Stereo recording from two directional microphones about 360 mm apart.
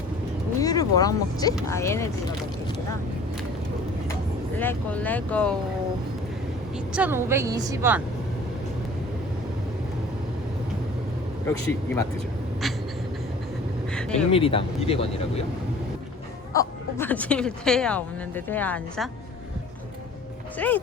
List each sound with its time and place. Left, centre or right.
0.6 s speech: centre
4.1 s speech: centre
6.9 s a woman's voice: centre
13.9 s a sound: centre
14.3 s speech: centre
16.5 s speech: centre
20.6 s speech: centre